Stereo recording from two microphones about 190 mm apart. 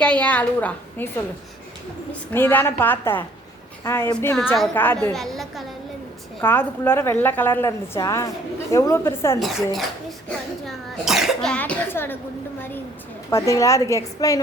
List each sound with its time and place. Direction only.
0.0 s a woman's voice: 5° left (ahead or behind)
2.3 s a woman's voice: 10° left (ahead or behind)
10.7 s a woman's voice: centre (ahead or behind)
13.3 s a woman's voice: 15° left (ahead or behind)